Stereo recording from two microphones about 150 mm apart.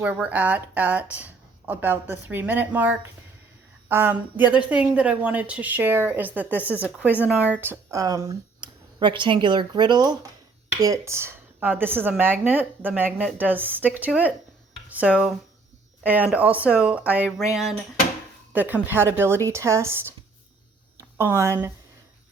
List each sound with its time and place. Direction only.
0.0 s a woman's voice: 10° right (ahead or behind)